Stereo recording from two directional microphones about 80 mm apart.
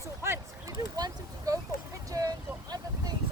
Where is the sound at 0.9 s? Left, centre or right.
Right.